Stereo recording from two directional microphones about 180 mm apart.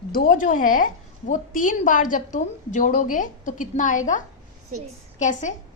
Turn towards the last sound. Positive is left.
turn(degrees=40)  # may be behind; listen again after turning